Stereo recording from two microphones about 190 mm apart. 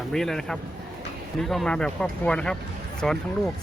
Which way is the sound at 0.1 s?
Centre (ahead or behind).